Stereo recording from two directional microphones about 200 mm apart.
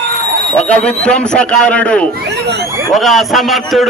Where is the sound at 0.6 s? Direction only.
5° left (ahead or behind).